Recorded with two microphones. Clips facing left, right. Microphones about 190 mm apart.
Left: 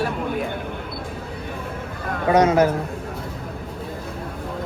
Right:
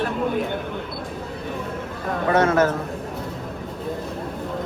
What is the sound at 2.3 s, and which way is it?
Speech, 15° left (ahead or behind).